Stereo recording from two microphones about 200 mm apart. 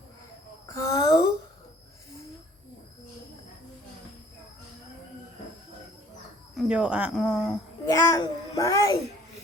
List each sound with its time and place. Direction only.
0.7 s a sound: 15° left (ahead or behind)
6.6 s speech: 5° right (ahead or behind)
7.9 s a child's voice: 15° left (ahead or behind)